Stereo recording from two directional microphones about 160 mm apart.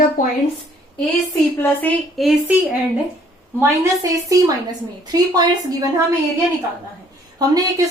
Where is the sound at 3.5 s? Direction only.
20° right (ahead or behind).